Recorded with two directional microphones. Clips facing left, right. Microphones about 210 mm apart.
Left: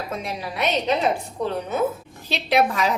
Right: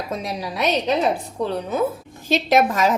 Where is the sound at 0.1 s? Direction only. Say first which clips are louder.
Right 2 dB; 35° right (ahead or behind).